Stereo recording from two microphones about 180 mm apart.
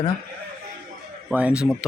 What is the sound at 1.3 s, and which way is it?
Speech, 5° right (ahead or behind).